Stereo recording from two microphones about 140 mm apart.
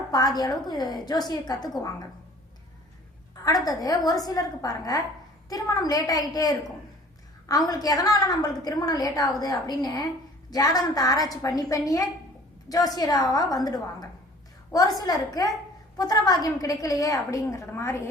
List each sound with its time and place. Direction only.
0.1 s a woman's voice: 30° left (ahead or behind)
3.4 s a woman's voice: 25° left (ahead or behind)
7.7 s a woman's voice: 25° left (ahead or behind)